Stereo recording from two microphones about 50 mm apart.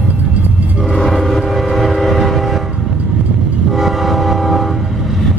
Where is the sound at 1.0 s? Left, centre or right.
Centre.